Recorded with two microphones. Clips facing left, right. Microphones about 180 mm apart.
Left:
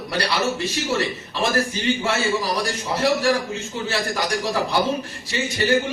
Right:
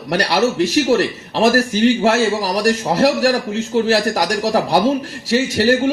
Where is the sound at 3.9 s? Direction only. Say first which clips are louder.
Right 7 dB; 85° right.